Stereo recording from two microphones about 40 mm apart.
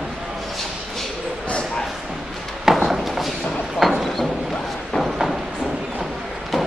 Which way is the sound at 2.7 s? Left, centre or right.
Centre.